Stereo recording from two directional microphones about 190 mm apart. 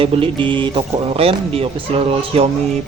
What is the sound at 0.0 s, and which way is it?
Speech, 25° right (ahead or behind).